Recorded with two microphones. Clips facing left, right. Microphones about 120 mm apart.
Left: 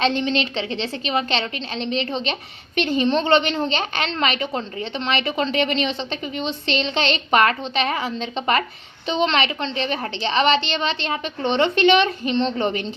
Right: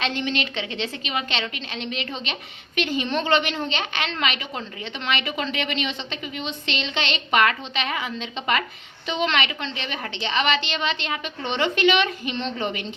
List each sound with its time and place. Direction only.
0.0 s a woman's voice: 30° left (ahead or behind)